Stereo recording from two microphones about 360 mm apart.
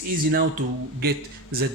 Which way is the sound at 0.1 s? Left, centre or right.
Right.